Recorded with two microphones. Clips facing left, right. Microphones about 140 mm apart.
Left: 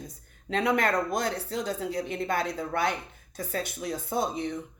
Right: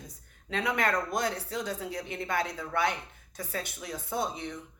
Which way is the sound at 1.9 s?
35° left (ahead or behind).